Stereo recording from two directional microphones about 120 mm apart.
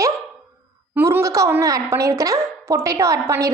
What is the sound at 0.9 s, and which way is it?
A woman's voice, 20° right (ahead or behind).